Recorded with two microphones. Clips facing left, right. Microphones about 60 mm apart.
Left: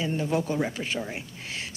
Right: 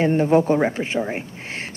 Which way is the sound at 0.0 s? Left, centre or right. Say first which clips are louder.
Right 10 dB; right.